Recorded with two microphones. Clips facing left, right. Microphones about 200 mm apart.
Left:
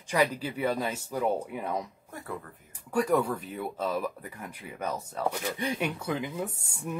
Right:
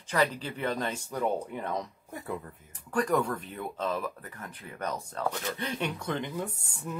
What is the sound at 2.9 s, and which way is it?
Speech, 5° left (ahead or behind).